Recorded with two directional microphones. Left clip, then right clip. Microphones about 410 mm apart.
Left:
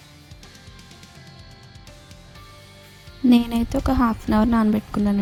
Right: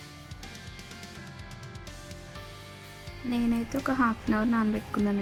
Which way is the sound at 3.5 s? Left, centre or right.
Centre.